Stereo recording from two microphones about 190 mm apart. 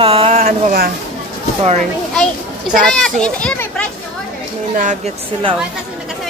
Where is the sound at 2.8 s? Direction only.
5° left (ahead or behind).